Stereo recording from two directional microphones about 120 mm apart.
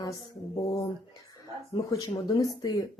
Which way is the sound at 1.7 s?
30° left (ahead or behind).